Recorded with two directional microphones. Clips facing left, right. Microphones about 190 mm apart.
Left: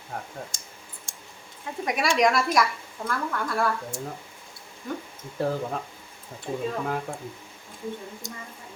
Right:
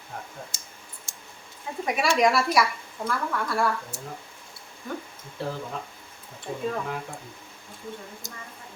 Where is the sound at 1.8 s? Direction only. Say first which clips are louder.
Even; centre (ahead or behind).